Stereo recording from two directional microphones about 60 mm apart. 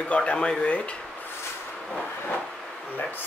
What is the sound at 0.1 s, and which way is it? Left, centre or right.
Speech, centre.